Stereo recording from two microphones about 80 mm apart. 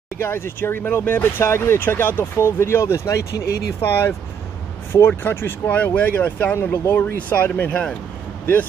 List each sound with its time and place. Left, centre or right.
0.2 s speech: left